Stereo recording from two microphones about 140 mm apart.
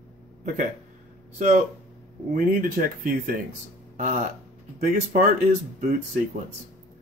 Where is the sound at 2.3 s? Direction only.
80° right.